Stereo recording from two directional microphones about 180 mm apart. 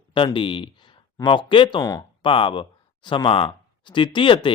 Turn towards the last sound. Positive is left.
turn(degrees=25)  # may be behind; listen again after turning